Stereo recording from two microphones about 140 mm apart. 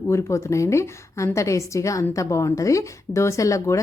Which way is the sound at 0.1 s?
20° left (ahead or behind).